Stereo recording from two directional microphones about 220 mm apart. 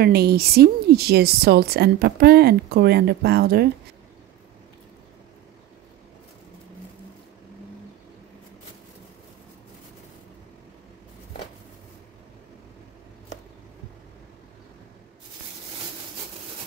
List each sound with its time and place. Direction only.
0.0 s speech: 45° right (ahead or behind)